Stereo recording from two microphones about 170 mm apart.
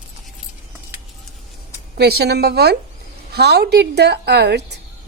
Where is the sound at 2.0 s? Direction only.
70° right (ahead or behind).